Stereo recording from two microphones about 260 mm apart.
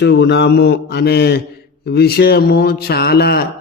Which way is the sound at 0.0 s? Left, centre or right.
Left.